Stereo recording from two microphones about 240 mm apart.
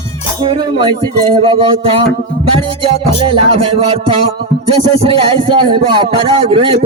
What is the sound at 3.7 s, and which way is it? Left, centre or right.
Speech, right.